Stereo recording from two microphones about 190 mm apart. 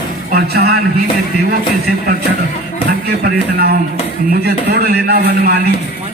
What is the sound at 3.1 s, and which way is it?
A man's voice, 55° right (ahead or behind).